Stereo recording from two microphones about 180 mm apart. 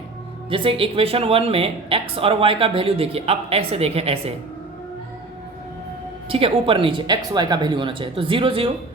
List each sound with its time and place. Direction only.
0.5 s speech: 30° right (ahead or behind)
6.2 s speech: 30° right (ahead or behind)